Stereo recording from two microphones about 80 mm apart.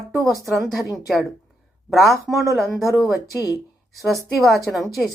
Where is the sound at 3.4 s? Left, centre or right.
Left.